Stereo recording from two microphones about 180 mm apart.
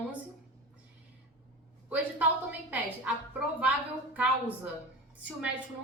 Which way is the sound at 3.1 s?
10° right (ahead or behind).